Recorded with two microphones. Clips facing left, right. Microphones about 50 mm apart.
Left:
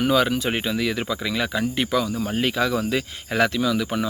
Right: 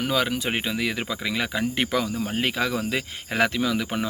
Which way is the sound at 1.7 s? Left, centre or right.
Right.